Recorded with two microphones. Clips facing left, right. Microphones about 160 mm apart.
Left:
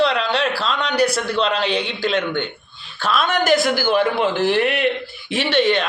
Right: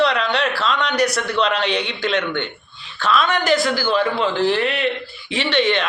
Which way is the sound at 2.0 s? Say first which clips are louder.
Left 1 dB; 35° left (ahead or behind).